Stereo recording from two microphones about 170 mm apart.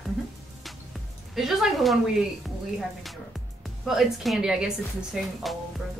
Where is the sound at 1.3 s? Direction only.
Centre (ahead or behind).